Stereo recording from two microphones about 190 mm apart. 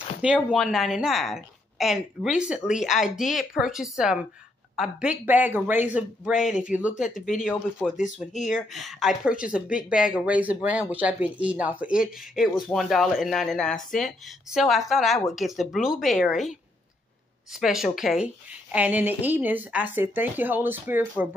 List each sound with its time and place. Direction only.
0.2 s a woman's voice: centre (ahead or behind)
8.0 s speech: 40° left (ahead or behind)
8.5 s a woman's voice: centre (ahead or behind)